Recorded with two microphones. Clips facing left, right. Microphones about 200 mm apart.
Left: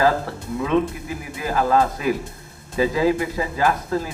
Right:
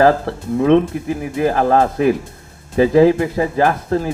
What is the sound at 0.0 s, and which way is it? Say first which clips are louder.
Speech: right 6 dB; 60° right (ahead or behind).